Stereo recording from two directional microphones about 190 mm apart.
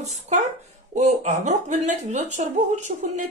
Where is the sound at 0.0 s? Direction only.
40° right (ahead or behind).